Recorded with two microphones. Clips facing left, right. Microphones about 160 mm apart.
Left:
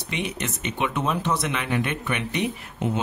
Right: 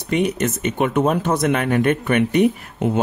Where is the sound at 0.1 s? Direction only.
45° right (ahead or behind).